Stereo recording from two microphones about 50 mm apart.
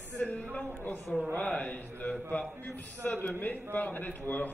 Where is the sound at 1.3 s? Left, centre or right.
Left.